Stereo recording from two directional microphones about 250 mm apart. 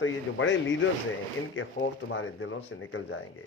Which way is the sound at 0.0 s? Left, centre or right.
Left.